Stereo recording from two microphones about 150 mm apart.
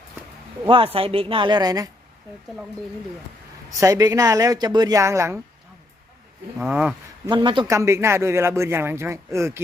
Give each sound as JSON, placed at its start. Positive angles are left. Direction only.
{"t": 0.9, "sound": "a woman's voice", "side_deg": -40}
{"t": 3.8, "sound": "a woman's voice", "side_deg": -20}
{"t": 6.6, "sound": "speech", "side_deg": -10}
{"t": 7.3, "sound": "a woman's voice", "side_deg": -30}
{"t": 7.7, "sound": "speech", "side_deg": -20}